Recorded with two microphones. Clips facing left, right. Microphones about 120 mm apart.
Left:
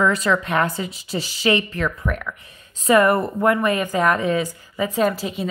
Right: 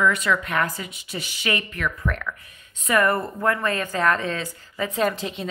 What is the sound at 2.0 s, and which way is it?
Speech, 10° left (ahead or behind).